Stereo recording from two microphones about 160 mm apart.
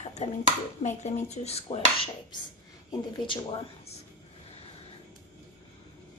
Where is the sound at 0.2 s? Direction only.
45° left (ahead or behind).